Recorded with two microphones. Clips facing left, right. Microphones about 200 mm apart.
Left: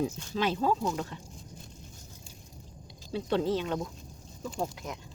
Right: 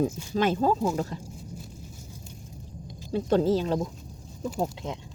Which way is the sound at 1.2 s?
5° right (ahead or behind).